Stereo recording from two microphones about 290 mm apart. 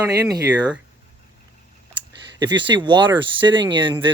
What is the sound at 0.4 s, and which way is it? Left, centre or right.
Speech, centre.